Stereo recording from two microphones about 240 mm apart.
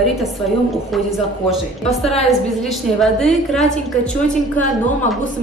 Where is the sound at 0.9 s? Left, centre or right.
Centre.